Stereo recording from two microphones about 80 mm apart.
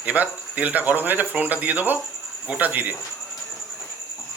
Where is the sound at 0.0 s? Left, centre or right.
Centre.